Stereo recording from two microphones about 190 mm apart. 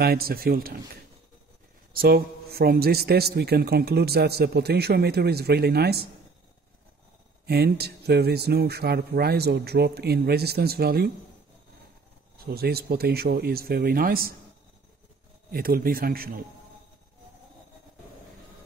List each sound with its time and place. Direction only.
0.0 s speech: 55° right (ahead or behind)
2.0 s a man's voice: 55° right (ahead or behind)
7.4 s a man's voice: 55° right (ahead or behind)
12.4 s speech: 55° right (ahead or behind)
15.5 s speech: 50° right (ahead or behind)